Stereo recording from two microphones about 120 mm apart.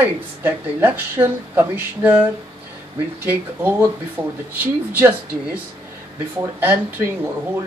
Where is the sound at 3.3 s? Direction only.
15° right (ahead or behind).